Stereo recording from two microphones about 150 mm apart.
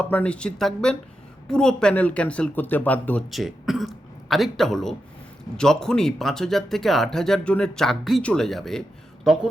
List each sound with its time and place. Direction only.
0.0 s speech: 10° left (ahead or behind)
3.2 s speech: centre (ahead or behind)